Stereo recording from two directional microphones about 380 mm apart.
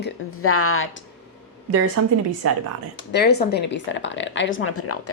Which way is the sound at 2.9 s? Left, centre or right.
Left.